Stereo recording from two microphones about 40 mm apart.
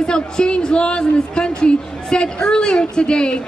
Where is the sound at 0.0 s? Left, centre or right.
Left.